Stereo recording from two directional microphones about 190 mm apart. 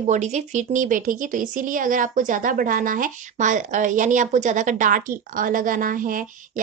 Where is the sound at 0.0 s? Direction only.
35° right (ahead or behind).